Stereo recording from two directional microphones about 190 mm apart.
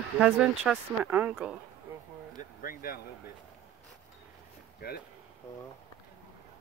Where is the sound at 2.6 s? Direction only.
50° left (ahead or behind).